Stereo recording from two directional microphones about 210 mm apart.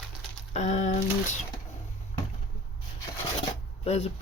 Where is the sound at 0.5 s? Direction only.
35° left (ahead or behind).